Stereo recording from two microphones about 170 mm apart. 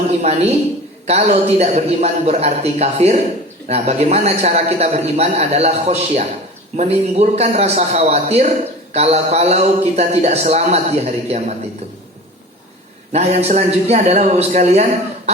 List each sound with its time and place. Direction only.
0.2 s a man's voice: 40° right (ahead or behind)
13.1 s a man's voice: 40° right (ahead or behind)